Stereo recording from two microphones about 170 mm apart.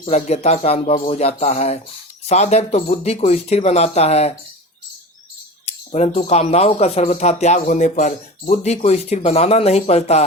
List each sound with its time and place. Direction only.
0.0 s speech: 40° left (ahead or behind)
5.6 s speech: 40° left (ahead or behind)